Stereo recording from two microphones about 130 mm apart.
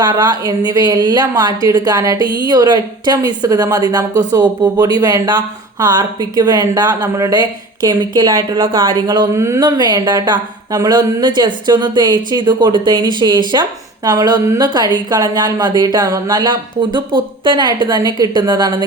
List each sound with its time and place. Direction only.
0.0 s speech: 35° right (ahead or behind)
9.6 s speech: 35° right (ahead or behind)